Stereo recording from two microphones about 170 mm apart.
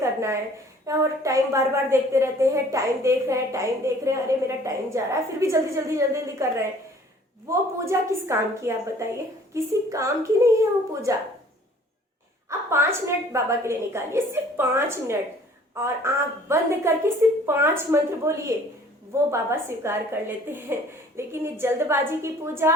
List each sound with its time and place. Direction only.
0.0 s a sound: 15° right (ahead or behind)
0.9 s a woman's voice: 20° right (ahead or behind)
12.5 s a woman's voice: 15° right (ahead or behind)